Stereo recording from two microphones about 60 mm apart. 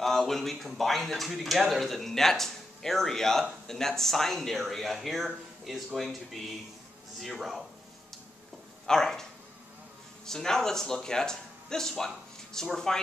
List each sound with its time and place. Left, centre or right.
0.0 s speech: centre
8.8 s speech: centre